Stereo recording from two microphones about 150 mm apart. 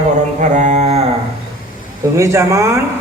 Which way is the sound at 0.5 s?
50° right (ahead or behind).